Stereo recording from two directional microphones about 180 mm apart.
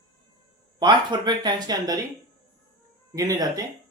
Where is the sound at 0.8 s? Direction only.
25° right (ahead or behind).